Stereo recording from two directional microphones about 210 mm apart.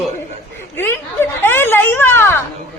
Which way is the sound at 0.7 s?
10° left (ahead or behind).